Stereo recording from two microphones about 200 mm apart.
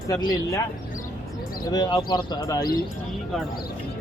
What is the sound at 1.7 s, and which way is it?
Speech, 20° left (ahead or behind).